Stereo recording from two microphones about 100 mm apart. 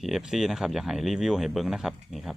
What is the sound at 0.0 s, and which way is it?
Speech, 5° right (ahead or behind).